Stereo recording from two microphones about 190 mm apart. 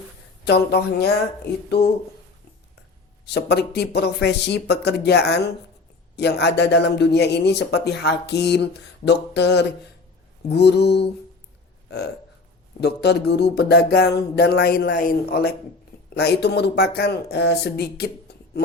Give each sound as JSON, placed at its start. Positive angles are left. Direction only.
{"t": 0.4, "sound": "speech", "side_deg": 60}
{"t": 3.2, "sound": "speech", "side_deg": 60}